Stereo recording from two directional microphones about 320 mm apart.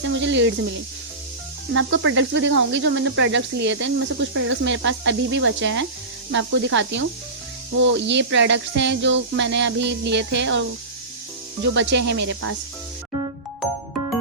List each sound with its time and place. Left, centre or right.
0.2 s speech: right
1.7 s speech: right